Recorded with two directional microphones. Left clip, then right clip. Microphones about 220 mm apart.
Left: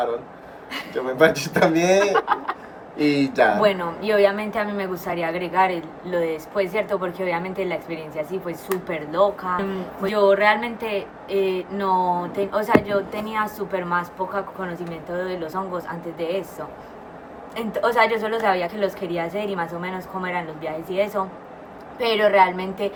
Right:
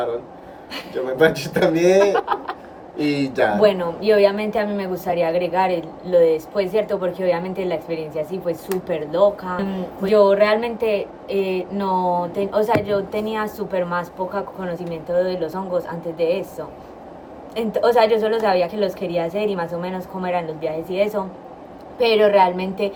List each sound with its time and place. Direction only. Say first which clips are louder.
0.9 s speech: right 1 dB; 5° left (ahead or behind)
2.1 s a woman's voice: even; 20° right (ahead or behind)
3.0 s speech: left 1 dB; centre (ahead or behind)
3.6 s a woman's voice: right 3 dB; 20° right (ahead or behind)